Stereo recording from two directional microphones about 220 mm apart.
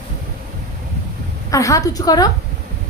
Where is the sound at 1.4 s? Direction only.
15° left (ahead or behind).